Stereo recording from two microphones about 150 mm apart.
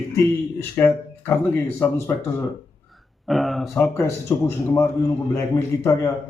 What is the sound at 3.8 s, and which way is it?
A man's voice, 15° left (ahead or behind).